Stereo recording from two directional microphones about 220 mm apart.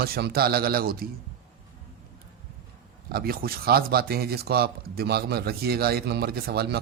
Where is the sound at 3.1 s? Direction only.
45° right (ahead or behind).